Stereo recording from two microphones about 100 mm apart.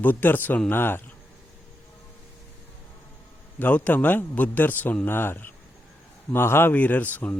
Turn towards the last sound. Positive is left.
turn(degrees=15)  # may be behind; listen again after turning